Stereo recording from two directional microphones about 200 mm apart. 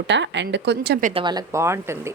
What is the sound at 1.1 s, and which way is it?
Speech, 25° right (ahead or behind).